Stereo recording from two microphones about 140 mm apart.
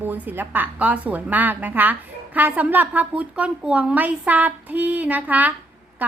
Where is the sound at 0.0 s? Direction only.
15° right (ahead or behind).